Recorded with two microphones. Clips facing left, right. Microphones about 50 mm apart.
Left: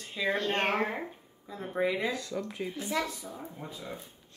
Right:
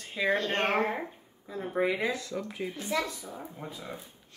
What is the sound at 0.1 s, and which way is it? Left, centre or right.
Speech, centre.